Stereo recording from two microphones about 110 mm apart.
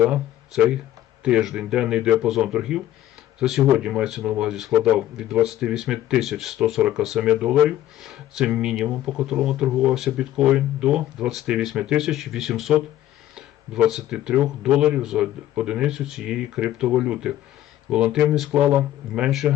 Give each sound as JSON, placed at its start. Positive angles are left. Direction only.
{"t": 0.0, "sound": "speech", "side_deg": -10}